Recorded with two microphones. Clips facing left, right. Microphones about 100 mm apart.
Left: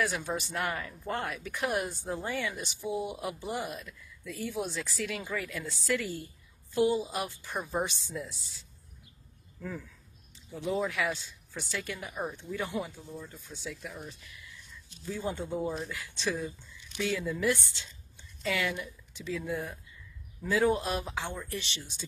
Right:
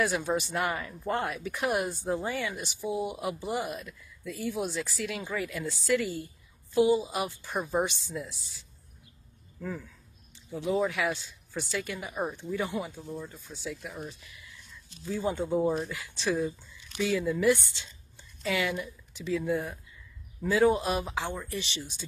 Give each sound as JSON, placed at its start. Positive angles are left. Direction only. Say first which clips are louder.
{"t": 0.0, "sound": "a woman's voice", "louder": "right 4 dB", "side_deg": -5}
{"t": 9.6, "sound": "speech", "louder": "right 3 dB", "side_deg": -5}
{"t": 10.9, "sound": "a woman's voice", "louder": "right 2 dB", "side_deg": -5}
{"t": 12.1, "sound": "speech", "louder": "right 3 dB", "side_deg": -25}
{"t": 12.4, "sound": "speech", "louder": "right 2 dB", "side_deg": -10}
{"t": 15.1, "sound": "a woman's voice", "louder": "right 6 dB", "side_deg": -5}